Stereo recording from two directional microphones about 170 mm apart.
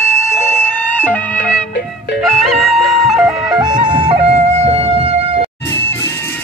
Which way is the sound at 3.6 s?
25° right (ahead or behind).